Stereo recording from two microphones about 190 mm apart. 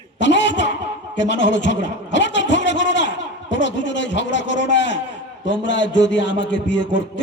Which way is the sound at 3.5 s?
70° left (ahead or behind).